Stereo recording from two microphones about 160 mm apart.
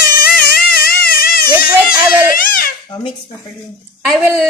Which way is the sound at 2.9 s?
25° left (ahead or behind).